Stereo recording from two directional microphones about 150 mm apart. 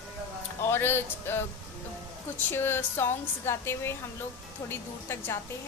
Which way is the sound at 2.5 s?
15° left (ahead or behind).